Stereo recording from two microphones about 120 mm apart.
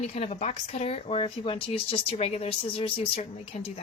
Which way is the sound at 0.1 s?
65° left (ahead or behind).